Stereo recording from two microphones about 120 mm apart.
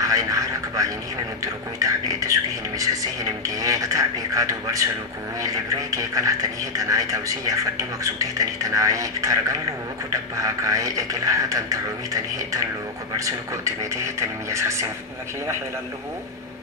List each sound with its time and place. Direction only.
0.0 s a sound: 30° right (ahead or behind)
1.4 s speech: 30° right (ahead or behind)
3.4 s speech: 30° right (ahead or behind)